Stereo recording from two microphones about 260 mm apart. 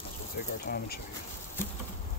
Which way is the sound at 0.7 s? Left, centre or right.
Left.